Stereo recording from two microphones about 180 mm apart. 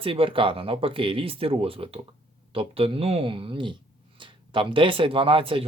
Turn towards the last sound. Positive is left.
turn(degrees=-30)  # may be behind; listen again after turning